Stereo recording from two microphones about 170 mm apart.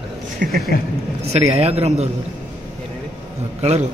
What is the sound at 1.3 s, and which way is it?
Speech, 35° right (ahead or behind).